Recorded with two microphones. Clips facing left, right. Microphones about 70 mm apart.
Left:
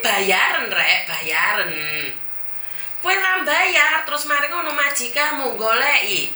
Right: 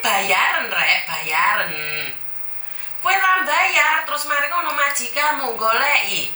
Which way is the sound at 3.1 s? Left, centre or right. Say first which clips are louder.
Right 2 dB; centre.